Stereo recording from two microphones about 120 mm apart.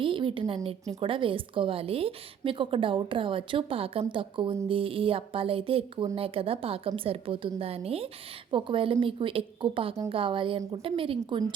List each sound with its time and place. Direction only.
0.0 s a woman's voice: 45° right (ahead or behind)